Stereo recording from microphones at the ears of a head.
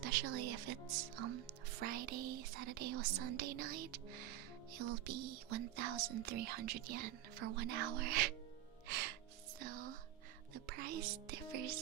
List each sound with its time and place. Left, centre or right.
0.0 s speech: right
9.6 s a sound: right
10.5 s speech: right